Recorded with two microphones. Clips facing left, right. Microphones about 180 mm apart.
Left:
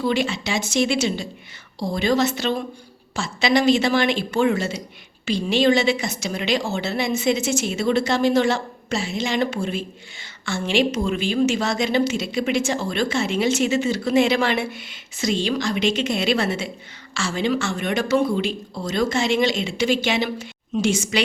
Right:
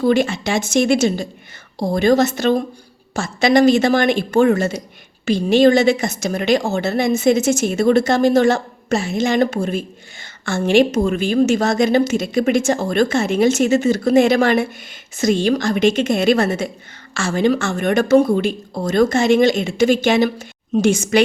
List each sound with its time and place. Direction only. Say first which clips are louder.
0.0 s a woman's voice: right 6 dB; 50° right (ahead or behind)